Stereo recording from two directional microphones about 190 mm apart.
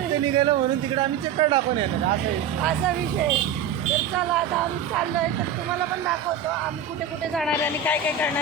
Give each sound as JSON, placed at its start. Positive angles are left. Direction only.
{"t": 0.3, "sound": "speech", "side_deg": -25}
{"t": 7.3, "sound": "speech", "side_deg": 5}